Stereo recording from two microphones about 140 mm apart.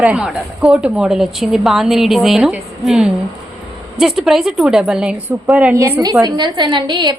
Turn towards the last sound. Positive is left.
turn(degrees=-30)  # may be behind; listen again after turning